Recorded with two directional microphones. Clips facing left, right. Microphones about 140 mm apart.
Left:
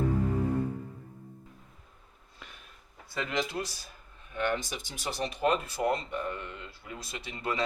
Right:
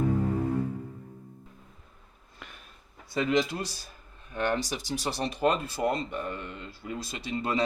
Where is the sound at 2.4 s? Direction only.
55° right (ahead or behind).